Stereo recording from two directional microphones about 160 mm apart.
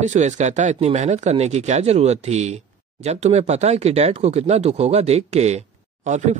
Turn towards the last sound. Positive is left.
turn(degrees=-50)  # may be behind; listen again after turning